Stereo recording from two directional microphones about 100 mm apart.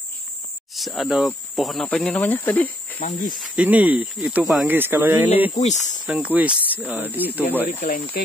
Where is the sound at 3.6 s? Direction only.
15° right (ahead or behind).